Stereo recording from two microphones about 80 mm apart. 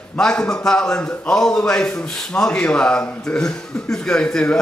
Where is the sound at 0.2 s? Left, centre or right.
Centre.